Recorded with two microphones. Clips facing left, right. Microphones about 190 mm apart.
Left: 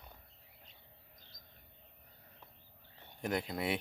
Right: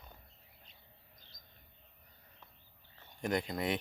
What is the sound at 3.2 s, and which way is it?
Speech, 5° left (ahead or behind).